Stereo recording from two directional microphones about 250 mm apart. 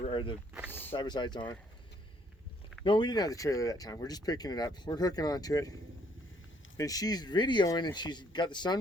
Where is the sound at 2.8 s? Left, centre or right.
Centre.